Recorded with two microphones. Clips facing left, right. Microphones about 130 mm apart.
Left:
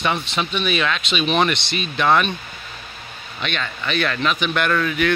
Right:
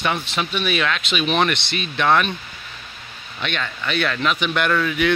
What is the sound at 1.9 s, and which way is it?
Speech, 5° left (ahead or behind).